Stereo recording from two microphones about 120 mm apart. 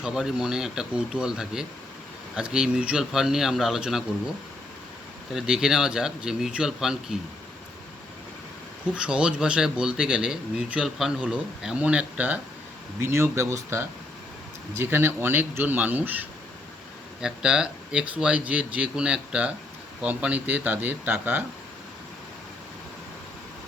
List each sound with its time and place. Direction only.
0.0 s speech: 5° right (ahead or behind)
5.3 s speech: 5° right (ahead or behind)
9.0 s a man's voice: 5° right (ahead or behind)